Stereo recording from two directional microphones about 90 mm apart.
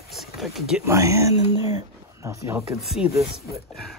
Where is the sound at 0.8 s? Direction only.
35° right (ahead or behind).